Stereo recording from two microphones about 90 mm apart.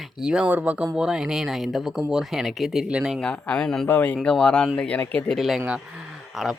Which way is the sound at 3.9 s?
20° left (ahead or behind).